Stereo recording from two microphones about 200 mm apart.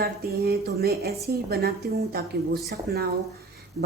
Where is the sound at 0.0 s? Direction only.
50° right (ahead or behind).